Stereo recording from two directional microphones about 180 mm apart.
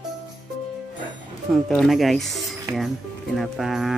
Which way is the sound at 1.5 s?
Centre (ahead or behind).